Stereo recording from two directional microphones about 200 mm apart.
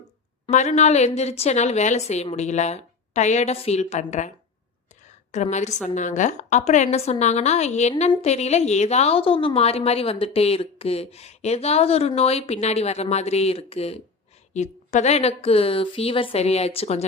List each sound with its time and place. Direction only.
0.4 s a woman's voice: 30° left (ahead or behind)
5.3 s a woman's voice: 35° left (ahead or behind)